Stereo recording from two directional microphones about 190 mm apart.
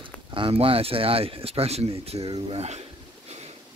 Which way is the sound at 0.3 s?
30° right (ahead or behind).